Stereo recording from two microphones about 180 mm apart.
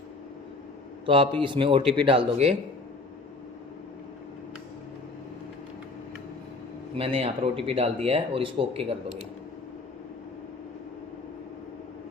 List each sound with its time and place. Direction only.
1.0 s speech: 25° right (ahead or behind)
6.9 s speech: 30° right (ahead or behind)